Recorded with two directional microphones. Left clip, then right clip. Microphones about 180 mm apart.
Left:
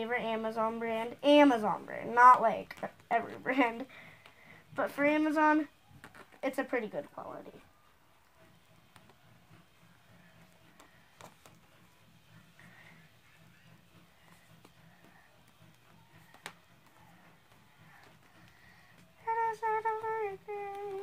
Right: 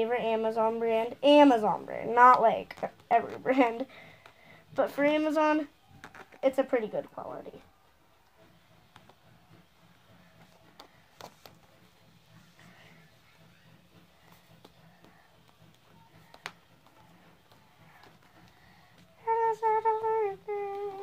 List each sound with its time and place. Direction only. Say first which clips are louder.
0.0 s a woman's voice: right 6 dB; 35° right (ahead or behind)
10.8 s a sound: right 6 dB; 40° right (ahead or behind)
19.2 s wind instrument: right 5 dB; 30° right (ahead or behind)